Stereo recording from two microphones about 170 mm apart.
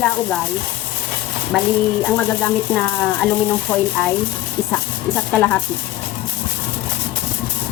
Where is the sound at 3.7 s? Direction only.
10° left (ahead or behind).